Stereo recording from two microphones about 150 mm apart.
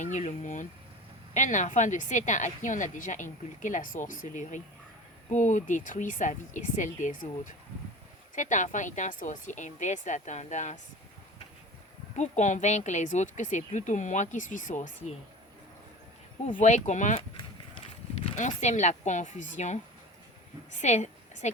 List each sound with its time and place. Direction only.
0.0 s speech: 55° left (ahead or behind)
12.1 s speech: 55° left (ahead or behind)
16.6 s speech: 50° left (ahead or behind)
20.8 s a woman's voice: 50° left (ahead or behind)